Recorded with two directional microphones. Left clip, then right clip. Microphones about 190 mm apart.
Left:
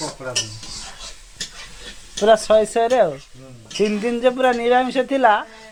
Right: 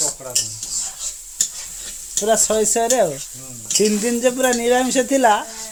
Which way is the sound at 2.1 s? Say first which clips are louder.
Left 4 dB; 10° right (ahead or behind).